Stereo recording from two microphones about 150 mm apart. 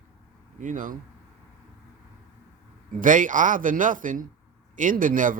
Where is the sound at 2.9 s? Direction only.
60° right (ahead or behind).